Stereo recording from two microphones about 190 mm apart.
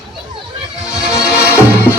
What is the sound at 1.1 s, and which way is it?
Music, 15° left (ahead or behind).